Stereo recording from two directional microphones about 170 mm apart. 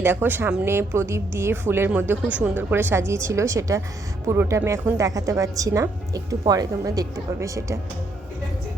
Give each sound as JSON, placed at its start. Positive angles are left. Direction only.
{"t": 0.0, "sound": "a woman's voice", "side_deg": -15}